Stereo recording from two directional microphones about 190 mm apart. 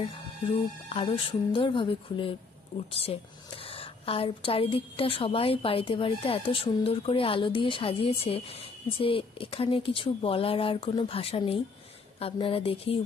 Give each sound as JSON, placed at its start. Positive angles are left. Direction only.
{"t": 0.8, "sound": "a woman's voice", "side_deg": 30}